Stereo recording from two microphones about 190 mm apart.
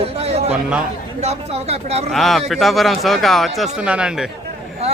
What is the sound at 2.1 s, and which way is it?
A man's voice, centre (ahead or behind).